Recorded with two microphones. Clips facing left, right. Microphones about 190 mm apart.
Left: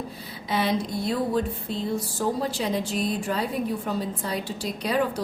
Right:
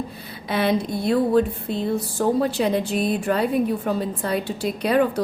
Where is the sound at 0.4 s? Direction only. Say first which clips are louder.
Right 4 dB; 60° right (ahead or behind).